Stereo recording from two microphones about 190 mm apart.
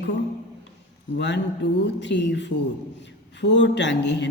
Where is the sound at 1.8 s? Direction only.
65° left (ahead or behind).